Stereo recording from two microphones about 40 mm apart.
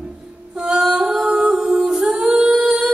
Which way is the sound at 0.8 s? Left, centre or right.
Centre.